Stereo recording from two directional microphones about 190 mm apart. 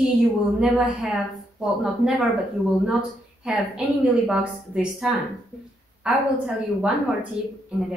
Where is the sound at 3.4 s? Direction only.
Centre (ahead or behind).